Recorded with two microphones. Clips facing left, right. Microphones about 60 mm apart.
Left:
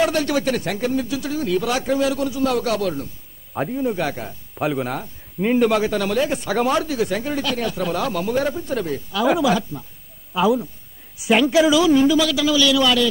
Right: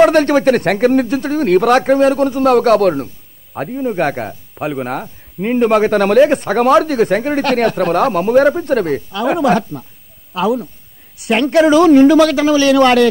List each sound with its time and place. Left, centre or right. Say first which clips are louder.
0.0 s speech: right 10 dB; right
3.5 s a man's voice: right 3 dB; centre
3.9 s speech: right 7 dB; right
4.6 s speech: right 1 dB; centre
4.8 s speech: right 5 dB; right
5.4 s a man's voice: right 3 dB; centre
5.7 s speech: right 8 dB; right
10.3 s speech: right 2 dB; centre
11.5 s speech: right 9 dB; right